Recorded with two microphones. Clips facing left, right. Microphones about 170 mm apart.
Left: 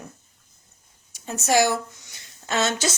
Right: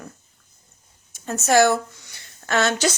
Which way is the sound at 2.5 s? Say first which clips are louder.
Right 3 dB; 25° left (ahead or behind).